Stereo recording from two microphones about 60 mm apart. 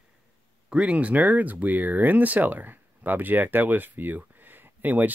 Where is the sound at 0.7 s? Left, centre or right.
Right.